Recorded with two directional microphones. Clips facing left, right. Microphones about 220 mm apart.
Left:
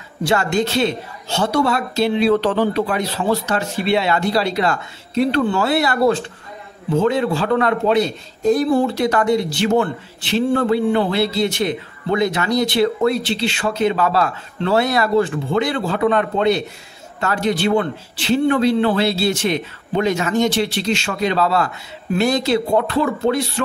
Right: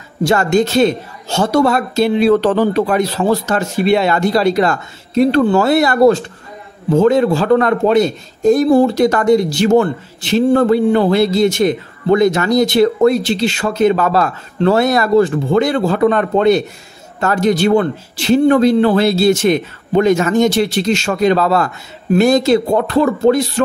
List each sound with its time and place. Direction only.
0.2 s a man's voice: 45° right (ahead or behind)